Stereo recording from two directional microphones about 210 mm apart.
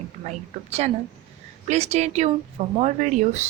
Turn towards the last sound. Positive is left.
turn(degrees=-35)  # may be behind; listen again after turning